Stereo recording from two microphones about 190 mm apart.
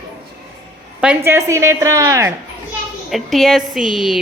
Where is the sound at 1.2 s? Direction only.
15° right (ahead or behind).